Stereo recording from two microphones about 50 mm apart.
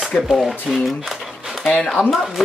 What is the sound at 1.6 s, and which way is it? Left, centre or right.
Speech, left.